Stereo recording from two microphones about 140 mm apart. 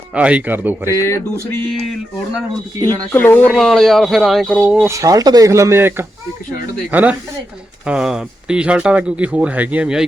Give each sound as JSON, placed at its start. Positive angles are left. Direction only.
{"t": 0.1, "sound": "speech", "side_deg": -10}
{"t": 0.9, "sound": "speech", "side_deg": 20}
{"t": 1.7, "sound": "speech", "side_deg": 0}
{"t": 3.1, "sound": "speech", "side_deg": 15}
{"t": 3.5, "sound": "speech", "side_deg": 0}
{"t": 4.9, "sound": "speech", "side_deg": -25}